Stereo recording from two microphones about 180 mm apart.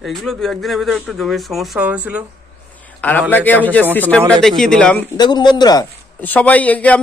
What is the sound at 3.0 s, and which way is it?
A man's voice, 10° left (ahead or behind).